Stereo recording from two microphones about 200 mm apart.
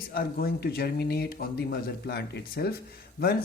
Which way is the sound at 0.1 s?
50° left (ahead or behind).